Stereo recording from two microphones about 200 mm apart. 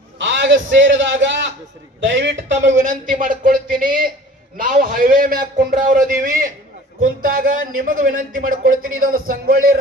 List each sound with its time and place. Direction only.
0.2 s a man's voice: 60° right (ahead or behind)
2.7 s a man's voice: 40° right (ahead or behind)